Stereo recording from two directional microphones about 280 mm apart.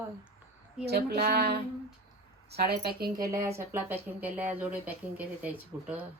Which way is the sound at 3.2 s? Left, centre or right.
Centre.